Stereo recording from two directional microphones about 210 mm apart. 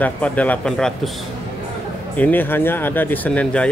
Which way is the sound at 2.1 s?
10° left (ahead or behind).